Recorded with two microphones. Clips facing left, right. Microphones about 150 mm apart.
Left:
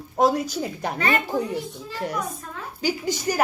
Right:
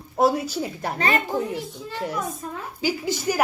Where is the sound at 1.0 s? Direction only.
25° right (ahead or behind).